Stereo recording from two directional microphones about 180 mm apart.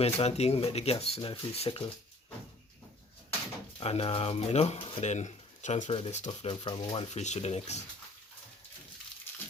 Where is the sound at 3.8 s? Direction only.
35° left (ahead or behind).